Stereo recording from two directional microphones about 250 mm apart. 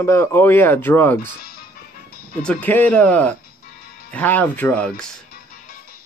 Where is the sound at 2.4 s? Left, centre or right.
Centre.